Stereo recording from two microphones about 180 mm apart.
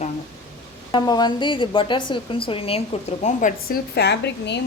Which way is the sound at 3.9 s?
65° left (ahead or behind).